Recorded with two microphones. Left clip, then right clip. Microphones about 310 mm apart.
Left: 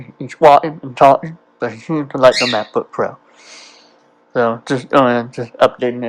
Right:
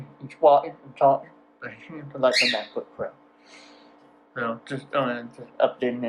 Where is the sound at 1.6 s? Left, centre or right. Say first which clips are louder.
Left 17 dB; centre.